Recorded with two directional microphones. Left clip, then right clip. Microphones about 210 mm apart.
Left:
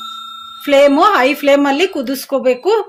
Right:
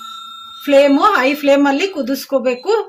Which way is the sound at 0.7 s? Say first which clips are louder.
Left 1 dB; 40° left (ahead or behind).